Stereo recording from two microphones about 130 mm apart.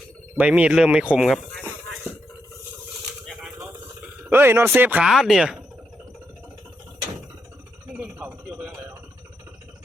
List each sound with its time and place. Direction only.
0.3 s rub: 10° right (ahead or behind)
4.3 s rub: 20° right (ahead or behind)
5.0 s speech: 5° right (ahead or behind)
7.9 s a sound: 10° right (ahead or behind)